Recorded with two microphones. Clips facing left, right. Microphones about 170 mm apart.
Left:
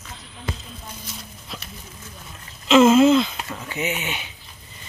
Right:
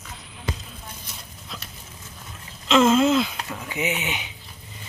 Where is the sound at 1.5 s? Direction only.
5° left (ahead or behind); by 4.3 s 15° right (ahead or behind).